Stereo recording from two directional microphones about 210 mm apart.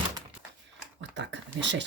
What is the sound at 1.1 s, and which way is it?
Speech, 55° right (ahead or behind).